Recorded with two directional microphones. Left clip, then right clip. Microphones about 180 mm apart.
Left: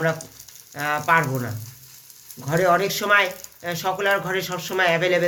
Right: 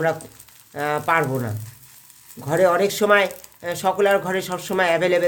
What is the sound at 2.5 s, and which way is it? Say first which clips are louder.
Speech: right 2 dB; 70° right (ahead or behind).